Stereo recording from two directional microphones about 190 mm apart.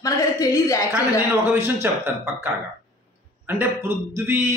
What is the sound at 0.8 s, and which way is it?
Speech, 10° right (ahead or behind).